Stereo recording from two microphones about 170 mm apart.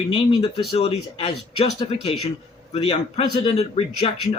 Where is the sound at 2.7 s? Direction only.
35° left (ahead or behind).